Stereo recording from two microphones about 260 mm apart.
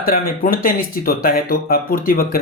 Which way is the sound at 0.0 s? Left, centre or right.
Left.